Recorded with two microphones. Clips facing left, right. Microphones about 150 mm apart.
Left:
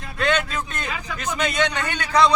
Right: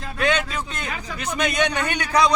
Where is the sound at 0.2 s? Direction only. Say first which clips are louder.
Even; 15° right (ahead or behind).